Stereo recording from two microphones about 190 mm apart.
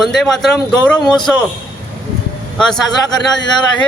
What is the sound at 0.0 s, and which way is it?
A man's voice, centre (ahead or behind).